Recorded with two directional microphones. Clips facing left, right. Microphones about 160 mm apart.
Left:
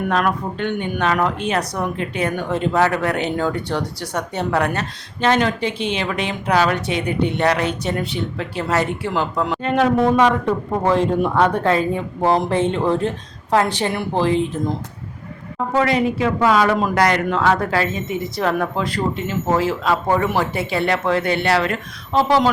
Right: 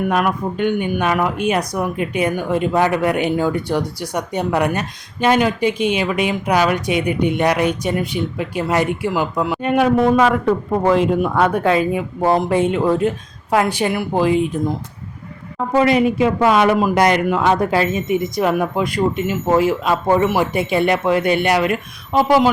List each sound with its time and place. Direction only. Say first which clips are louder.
0.1 s speech: right 1 dB; 10° right (ahead or behind)
15.7 s a man's voice: right 4 dB; 15° right (ahead or behind)